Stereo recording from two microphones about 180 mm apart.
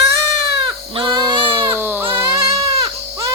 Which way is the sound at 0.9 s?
25° right (ahead or behind).